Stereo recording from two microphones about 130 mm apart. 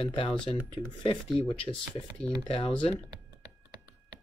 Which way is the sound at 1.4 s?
40° left (ahead or behind).